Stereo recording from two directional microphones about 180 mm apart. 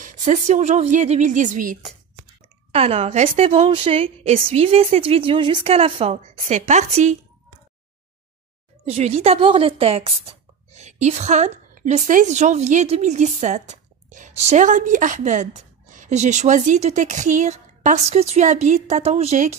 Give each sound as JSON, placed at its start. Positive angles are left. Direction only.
{"t": 0.0, "sound": "a sound", "side_deg": -45}
{"t": 0.5, "sound": "a woman's voice", "side_deg": -40}
{"t": 2.7, "sound": "a woman's voice", "side_deg": -35}
{"t": 8.8, "sound": "a woman's voice", "side_deg": -35}